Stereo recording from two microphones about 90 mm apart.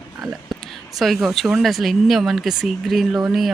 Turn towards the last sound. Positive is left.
turn(degrees=-5)  # may be behind; listen again after turning